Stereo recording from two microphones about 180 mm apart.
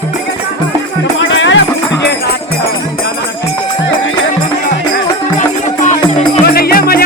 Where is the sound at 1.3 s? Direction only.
90° left.